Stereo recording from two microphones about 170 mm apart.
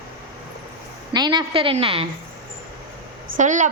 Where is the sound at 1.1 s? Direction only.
25° right (ahead or behind).